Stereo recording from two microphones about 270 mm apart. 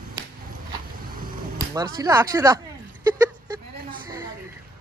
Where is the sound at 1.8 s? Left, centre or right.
Centre.